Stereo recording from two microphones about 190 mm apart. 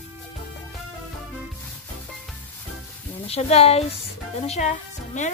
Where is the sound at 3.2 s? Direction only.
30° left (ahead or behind).